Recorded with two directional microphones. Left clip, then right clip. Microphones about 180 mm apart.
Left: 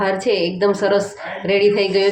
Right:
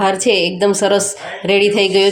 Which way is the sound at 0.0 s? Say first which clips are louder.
Right 4 dB; 35° right (ahead or behind).